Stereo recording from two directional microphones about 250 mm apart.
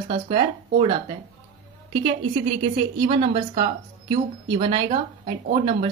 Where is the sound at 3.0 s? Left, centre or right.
Right.